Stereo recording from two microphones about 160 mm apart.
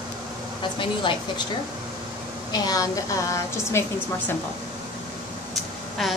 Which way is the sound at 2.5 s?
20° left (ahead or behind).